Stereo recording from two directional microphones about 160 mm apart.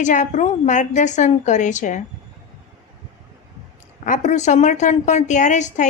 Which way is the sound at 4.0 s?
50° left (ahead or behind).